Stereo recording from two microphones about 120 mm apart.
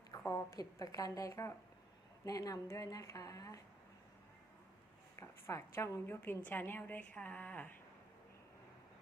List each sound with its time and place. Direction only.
0.3 s a woman's voice: 30° left (ahead or behind)
5.2 s a woman's voice: 20° left (ahead or behind)